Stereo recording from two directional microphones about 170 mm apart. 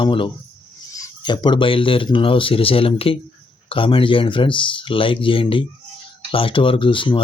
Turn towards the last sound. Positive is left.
turn(degrees=30)  # may be behind; listen again after turning